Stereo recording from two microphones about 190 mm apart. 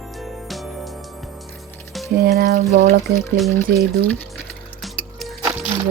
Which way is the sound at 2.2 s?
55° right (ahead or behind).